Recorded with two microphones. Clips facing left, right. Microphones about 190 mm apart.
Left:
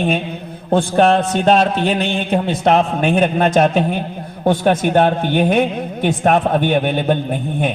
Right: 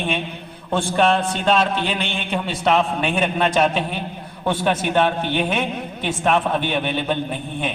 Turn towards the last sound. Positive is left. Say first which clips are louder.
# left 5 dB
turn(degrees=45)  # may be behind; listen again after turning